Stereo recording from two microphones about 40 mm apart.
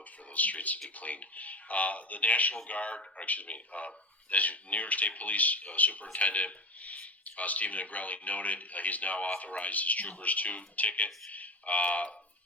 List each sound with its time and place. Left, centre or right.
0.3 s speech: left